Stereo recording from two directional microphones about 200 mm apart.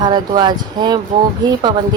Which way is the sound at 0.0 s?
20° right (ahead or behind).